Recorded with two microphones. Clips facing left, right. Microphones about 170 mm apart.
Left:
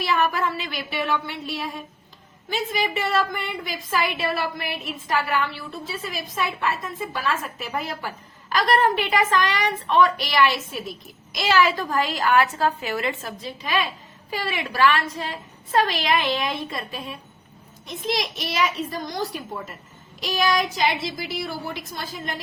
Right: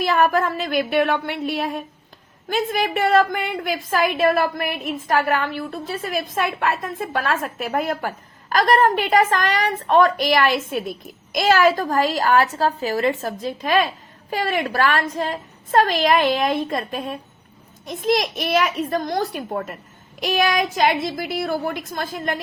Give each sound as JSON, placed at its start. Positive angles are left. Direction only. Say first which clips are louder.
{"t": 0.0, "sound": "a child's voice", "louder": "right 5 dB", "side_deg": -45}